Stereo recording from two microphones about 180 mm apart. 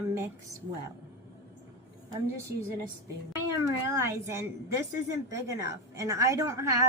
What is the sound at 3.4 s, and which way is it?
A woman's voice, 15° right (ahead or behind).